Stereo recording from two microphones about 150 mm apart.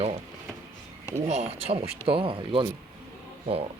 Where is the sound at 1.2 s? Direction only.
45° right (ahead or behind).